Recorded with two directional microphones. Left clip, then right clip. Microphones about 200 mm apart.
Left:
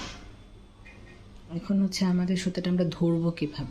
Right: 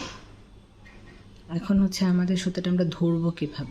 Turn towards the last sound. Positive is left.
turn(degrees=-5)  # may be behind; listen again after turning